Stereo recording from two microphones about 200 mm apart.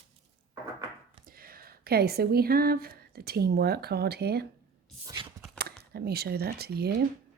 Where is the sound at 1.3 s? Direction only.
45° right (ahead or behind).